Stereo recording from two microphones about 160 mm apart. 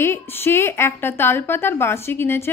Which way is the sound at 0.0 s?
15° left (ahead or behind).